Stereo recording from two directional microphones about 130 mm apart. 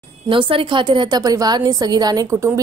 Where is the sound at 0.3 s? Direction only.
40° right (ahead or behind).